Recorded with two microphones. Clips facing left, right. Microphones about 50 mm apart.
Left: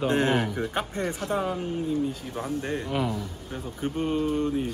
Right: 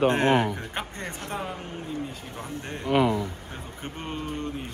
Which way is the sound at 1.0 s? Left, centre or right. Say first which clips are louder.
Left 6 dB; right.